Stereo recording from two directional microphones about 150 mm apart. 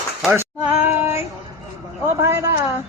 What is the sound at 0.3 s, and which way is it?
Female singing, 15° right (ahead or behind).